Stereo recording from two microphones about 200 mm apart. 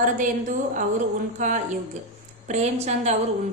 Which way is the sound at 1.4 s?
40° right (ahead or behind).